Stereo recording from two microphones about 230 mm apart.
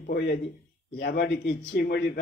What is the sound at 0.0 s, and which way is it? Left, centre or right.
A man's voice, left.